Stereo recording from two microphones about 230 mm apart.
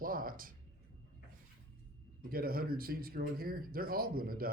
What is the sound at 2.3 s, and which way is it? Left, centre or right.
Speech, right.